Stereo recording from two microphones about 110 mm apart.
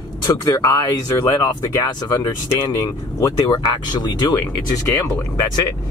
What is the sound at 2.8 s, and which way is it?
Speech, 30° left (ahead or behind).